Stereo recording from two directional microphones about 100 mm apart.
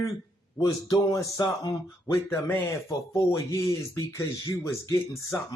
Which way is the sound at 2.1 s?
25° left (ahead or behind).